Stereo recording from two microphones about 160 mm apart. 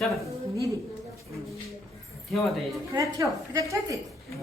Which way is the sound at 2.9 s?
20° right (ahead or behind).